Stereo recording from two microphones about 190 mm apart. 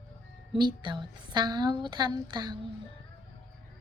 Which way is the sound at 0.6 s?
25° right (ahead or behind).